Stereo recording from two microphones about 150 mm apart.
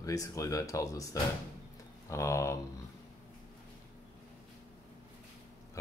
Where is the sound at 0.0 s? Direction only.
20° left (ahead or behind).